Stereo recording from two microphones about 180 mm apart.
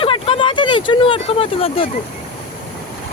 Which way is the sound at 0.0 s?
30° left (ahead or behind).